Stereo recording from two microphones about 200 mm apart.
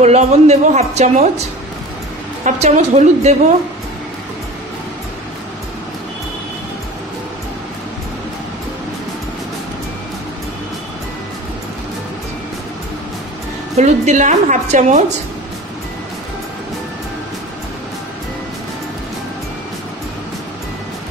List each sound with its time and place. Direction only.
0.0 s a woman's voice: 35° right (ahead or behind)
2.4 s a woman's voice: 35° right (ahead or behind)
13.7 s a woman's voice: 35° right (ahead or behind)